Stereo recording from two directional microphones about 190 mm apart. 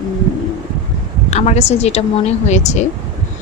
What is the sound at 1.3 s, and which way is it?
Speech, 35° left (ahead or behind).